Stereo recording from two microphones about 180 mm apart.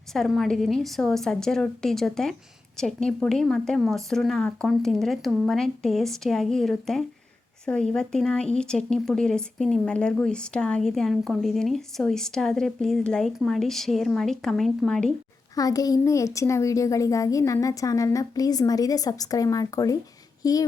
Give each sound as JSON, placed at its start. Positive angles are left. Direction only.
{"t": 0.1, "sound": "speech", "side_deg": 0}
{"t": 15.5, "sound": "speech", "side_deg": 20}